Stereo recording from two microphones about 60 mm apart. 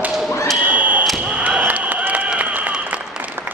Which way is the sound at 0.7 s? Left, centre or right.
Right.